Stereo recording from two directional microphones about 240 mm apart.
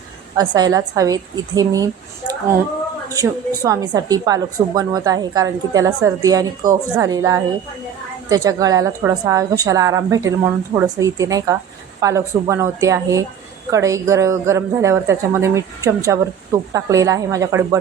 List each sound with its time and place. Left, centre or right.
0.3 s a woman's voice: centre